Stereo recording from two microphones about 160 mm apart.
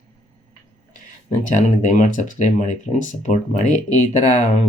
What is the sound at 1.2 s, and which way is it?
Speech, 50° left (ahead or behind).